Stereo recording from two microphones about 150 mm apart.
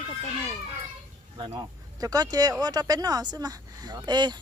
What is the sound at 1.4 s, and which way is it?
Speech, 25° right (ahead or behind).